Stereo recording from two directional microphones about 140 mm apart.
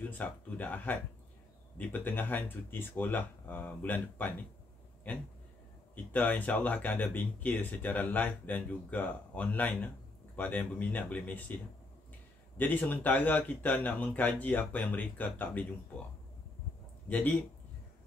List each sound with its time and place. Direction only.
0.0 s speech: 10° left (ahead or behind)
17.1 s speech: 10° left (ahead or behind)